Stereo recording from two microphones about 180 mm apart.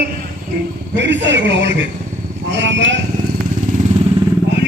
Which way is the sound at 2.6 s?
90° right.